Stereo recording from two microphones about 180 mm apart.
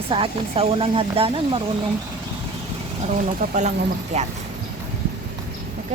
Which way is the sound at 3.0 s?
40° right (ahead or behind).